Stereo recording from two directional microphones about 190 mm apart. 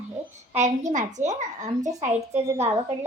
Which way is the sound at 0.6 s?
40° right (ahead or behind).